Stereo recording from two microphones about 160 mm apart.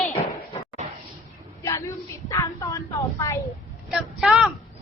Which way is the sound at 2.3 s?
20° left (ahead or behind).